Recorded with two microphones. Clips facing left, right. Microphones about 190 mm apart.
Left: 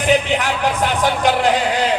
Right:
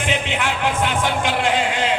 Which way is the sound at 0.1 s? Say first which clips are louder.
Left 8 dB; 40° left (ahead or behind).